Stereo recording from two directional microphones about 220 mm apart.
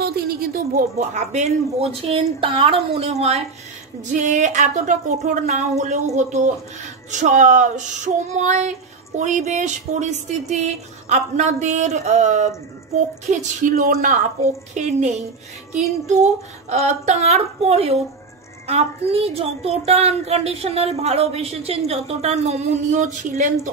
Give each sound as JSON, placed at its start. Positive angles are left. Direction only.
{"t": 0.0, "sound": "a woman's voice", "side_deg": -45}
{"t": 4.2, "sound": "female singing", "side_deg": -35}
{"t": 16.7, "sound": "a woman's voice", "side_deg": -30}